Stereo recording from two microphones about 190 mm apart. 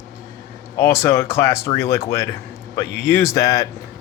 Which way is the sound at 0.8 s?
15° left (ahead or behind).